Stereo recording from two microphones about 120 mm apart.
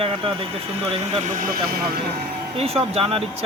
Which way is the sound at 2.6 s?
55° right (ahead or behind).